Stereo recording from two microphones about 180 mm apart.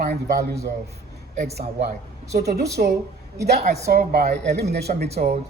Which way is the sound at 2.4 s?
65° right (ahead or behind).